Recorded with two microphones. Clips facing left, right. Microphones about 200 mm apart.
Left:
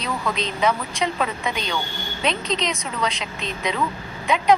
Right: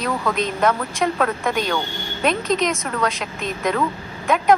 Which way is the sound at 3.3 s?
50° right (ahead or behind).